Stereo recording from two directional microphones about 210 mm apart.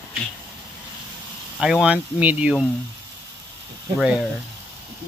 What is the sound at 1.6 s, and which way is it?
Speech, 5° right (ahead or behind).